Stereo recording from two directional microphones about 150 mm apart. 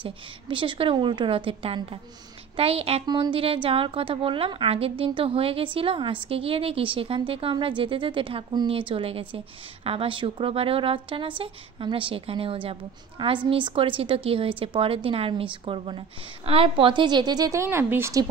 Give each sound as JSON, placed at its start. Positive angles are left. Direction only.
{"t": 0.0, "sound": "a woman's voice", "side_deg": -35}